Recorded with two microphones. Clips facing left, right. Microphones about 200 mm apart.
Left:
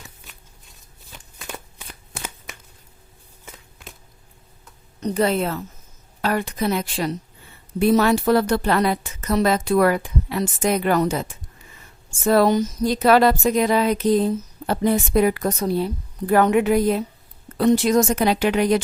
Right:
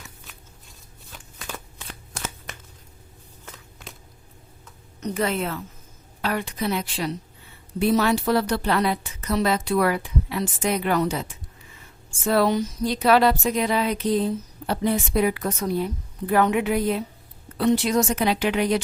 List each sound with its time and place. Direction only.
1.9 s shuffling cards: 5° left (ahead or behind)
3.4 s a sound: 5° left (ahead or behind)
4.9 s a woman's voice: 35° left (ahead or behind)